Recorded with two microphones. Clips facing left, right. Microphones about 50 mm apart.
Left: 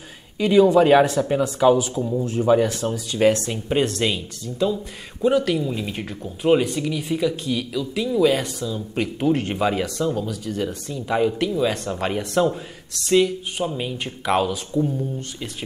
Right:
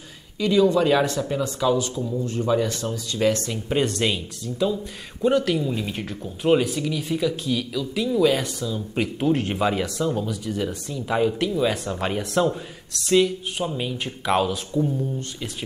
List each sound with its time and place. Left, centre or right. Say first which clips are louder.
0.4 s speech: left 4 dB; left
1.0 s speech: left 4 dB; centre
3.3 s speech: left 2 dB; centre